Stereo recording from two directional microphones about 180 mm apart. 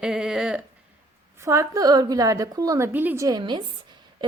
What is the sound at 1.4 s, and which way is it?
A woman's voice, 15° right (ahead or behind).